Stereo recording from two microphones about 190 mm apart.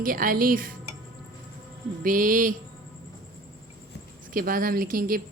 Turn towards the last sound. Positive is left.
turn(degrees=-50)  # may be behind; listen again after turning